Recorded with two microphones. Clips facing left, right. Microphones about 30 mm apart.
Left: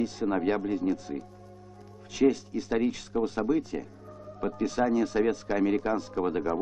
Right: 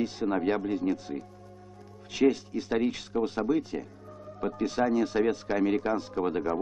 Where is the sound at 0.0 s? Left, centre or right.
Right.